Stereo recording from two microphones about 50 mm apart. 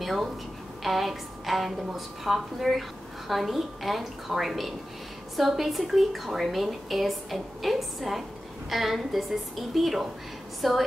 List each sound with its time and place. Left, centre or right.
0.0 s a woman's voice: centre